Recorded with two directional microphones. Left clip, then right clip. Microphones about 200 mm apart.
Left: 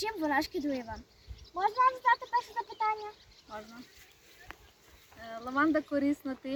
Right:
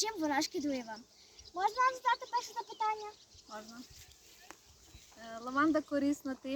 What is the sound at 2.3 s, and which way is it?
Speech, 5° left (ahead or behind).